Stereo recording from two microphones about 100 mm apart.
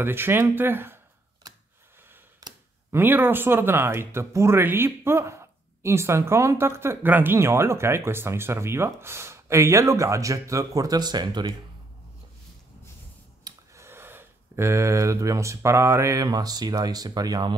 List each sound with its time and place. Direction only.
0.0 s speech: 20° right (ahead or behind)
2.9 s speech: 20° right (ahead or behind); by 11.5 s 45° right (ahead or behind)
13.7 s speech: 25° right (ahead or behind); by 17.6 s 45° right (ahead or behind)